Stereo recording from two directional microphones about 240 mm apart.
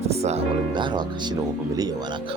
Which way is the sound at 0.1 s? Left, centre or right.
Right.